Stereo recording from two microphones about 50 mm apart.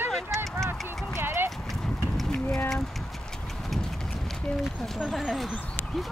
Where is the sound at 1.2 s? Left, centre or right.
Right.